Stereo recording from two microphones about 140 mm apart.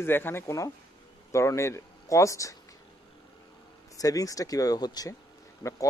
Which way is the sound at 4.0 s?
25° left (ahead or behind).